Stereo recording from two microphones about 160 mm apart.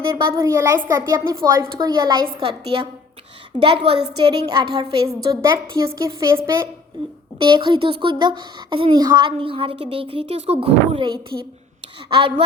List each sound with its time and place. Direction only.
0.2 s a woman's voice: 20° right (ahead or behind)
3.6 s a woman's voice: 30° right (ahead or behind)
7.3 s speech: 30° right (ahead or behind)